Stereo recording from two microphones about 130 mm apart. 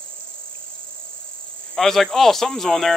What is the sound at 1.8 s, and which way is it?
Speech, centre (ahead or behind).